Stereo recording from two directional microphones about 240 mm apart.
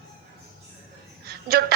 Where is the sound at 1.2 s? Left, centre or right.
Right.